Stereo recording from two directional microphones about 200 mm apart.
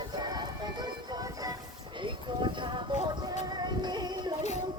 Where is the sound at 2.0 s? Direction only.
25° right (ahead or behind).